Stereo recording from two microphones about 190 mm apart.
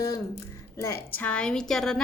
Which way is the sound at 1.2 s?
5° left (ahead or behind).